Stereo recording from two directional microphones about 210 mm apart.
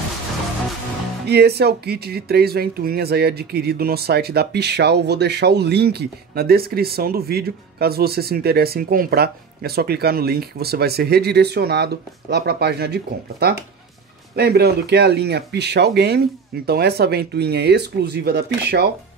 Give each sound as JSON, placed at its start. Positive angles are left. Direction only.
{"t": 1.2, "sound": "speech", "side_deg": -50}